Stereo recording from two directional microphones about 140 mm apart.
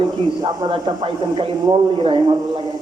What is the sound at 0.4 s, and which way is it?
Speech, 35° right (ahead or behind).